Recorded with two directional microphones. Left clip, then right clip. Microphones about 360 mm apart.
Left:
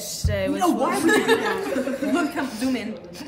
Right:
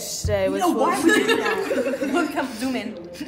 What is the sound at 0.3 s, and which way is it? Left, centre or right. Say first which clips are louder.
Speech: right 2 dB; centre.